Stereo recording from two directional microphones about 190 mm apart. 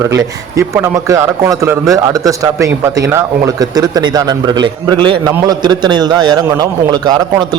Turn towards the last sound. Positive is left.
turn(degrees=-20)  # may be behind; listen again after turning